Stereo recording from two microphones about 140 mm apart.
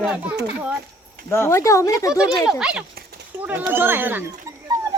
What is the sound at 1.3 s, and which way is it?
Speech, 20° left (ahead or behind).